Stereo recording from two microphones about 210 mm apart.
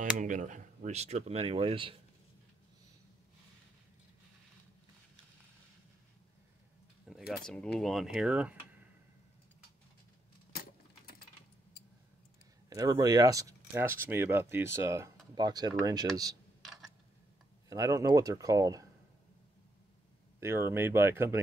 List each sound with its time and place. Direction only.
0.0 s speech: 35° right (ahead or behind)
7.1 s speech: centre (ahead or behind)
10.5 s keys jangling: 45° left (ahead or behind)
11.7 s a sound: 50° left (ahead or behind)
12.6 s speech: 15° right (ahead or behind)
17.6 s speech: 15° right (ahead or behind)
20.3 s speech: 15° right (ahead or behind)